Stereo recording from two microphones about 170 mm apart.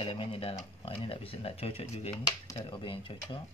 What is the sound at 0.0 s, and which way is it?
Speech, 30° left (ahead or behind).